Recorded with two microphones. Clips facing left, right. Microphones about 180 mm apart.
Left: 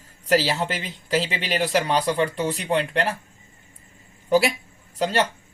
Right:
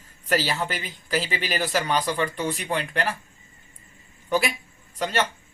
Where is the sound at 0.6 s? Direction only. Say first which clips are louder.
Left 2 dB; 25° left (ahead or behind).